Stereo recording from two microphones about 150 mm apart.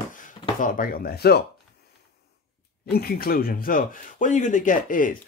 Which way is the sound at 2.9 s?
90° left.